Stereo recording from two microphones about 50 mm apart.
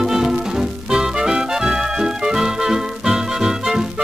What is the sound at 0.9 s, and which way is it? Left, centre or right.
Music, centre.